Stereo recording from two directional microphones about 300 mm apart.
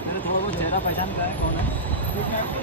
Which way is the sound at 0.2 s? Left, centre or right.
Centre.